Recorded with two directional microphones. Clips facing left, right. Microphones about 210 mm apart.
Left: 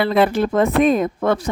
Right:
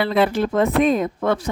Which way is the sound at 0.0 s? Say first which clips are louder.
Left 2 dB; 50° left (ahead or behind).